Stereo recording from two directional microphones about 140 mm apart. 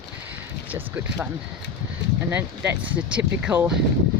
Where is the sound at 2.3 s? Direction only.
10° right (ahead or behind).